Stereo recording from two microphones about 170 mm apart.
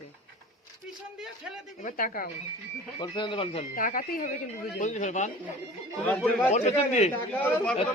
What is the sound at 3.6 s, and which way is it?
A woman's voice, 50° left (ahead or behind).